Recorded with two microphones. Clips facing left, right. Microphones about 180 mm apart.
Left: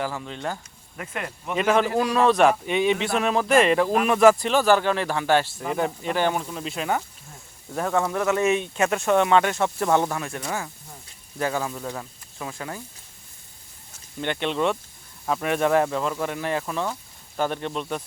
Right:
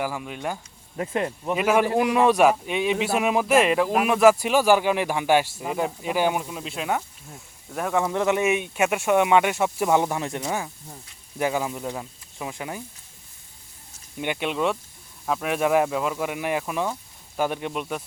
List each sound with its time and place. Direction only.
0.0 s speech: 10° right (ahead or behind)
0.9 s speech: 25° right (ahead or behind)
1.5 s speech: 10° right (ahead or behind)
1.9 s speech: 20° right (ahead or behind); by 7.9 s 5° right (ahead or behind)
7.9 s speech: 20° right (ahead or behind)
8.4 s speech: 10° right (ahead or behind)
14.2 s speech: 10° right (ahead or behind)